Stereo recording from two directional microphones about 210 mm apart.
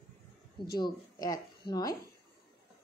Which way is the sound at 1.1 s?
20° left (ahead or behind).